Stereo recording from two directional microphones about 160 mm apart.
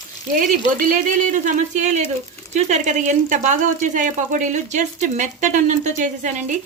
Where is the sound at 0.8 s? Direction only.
55° right (ahead or behind).